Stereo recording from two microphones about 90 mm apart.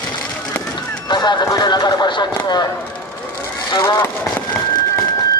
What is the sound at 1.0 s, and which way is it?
Speech, 55° left (ahead or behind).